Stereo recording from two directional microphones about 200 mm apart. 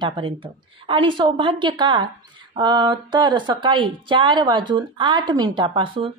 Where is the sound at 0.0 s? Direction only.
25° right (ahead or behind).